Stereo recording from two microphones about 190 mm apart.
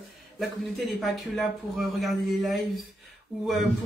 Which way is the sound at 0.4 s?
Centre (ahead or behind).